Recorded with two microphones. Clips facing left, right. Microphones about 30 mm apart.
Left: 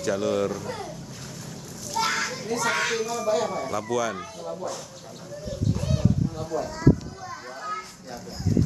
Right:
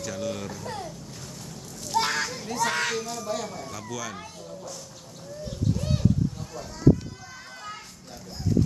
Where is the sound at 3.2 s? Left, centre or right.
Left.